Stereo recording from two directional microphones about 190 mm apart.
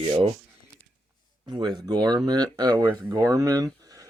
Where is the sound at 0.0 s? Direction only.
30° right (ahead or behind).